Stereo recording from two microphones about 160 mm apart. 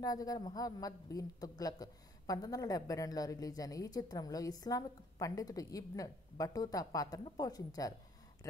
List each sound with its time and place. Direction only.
0.0 s a man's voice: 20° left (ahead or behind)